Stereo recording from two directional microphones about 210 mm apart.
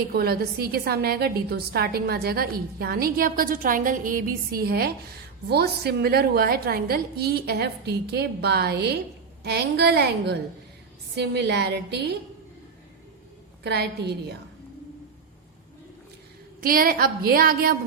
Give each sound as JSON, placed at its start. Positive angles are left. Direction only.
{"t": 0.1, "sound": "a woman's voice", "side_deg": -45}
{"t": 13.7, "sound": "a woman's voice", "side_deg": -50}
{"t": 16.6, "sound": "a woman's voice", "side_deg": -45}